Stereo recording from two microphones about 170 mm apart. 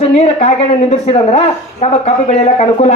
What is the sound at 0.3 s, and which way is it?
A woman's voice, 40° left (ahead or behind).